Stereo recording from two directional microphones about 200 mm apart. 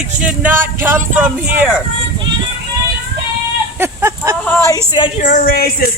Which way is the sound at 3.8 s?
10° right (ahead or behind).